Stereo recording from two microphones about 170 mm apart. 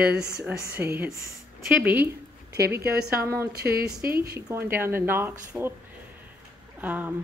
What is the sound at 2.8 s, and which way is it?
A woman's voice, 65° right (ahead or behind).